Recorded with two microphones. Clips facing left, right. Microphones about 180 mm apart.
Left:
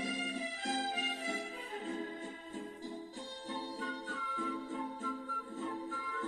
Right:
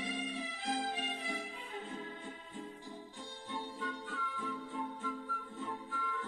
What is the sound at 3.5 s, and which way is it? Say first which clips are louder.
Music: even; 40° left (ahead or behind).